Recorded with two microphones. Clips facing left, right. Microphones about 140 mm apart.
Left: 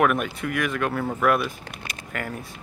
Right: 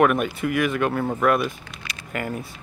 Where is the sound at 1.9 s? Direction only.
50° left (ahead or behind).